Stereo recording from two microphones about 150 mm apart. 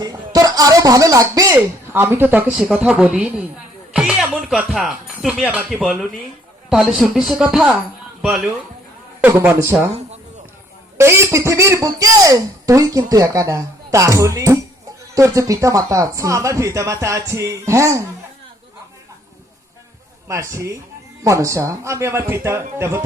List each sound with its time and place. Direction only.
0.0 s speech: 25° right (ahead or behind); by 7.8 s 5° right (ahead or behind)
9.2 s speech: 15° right (ahead or behind)
10.9 s speech: 15° right (ahead or behind)
20.2 s speech: 20° right (ahead or behind)